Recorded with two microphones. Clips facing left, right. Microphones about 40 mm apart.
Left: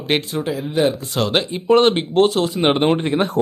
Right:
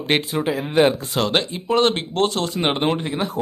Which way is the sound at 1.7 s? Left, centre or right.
Centre.